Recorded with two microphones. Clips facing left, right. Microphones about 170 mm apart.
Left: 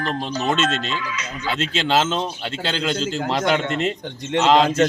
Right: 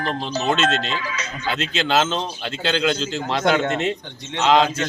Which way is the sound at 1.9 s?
5° left (ahead or behind).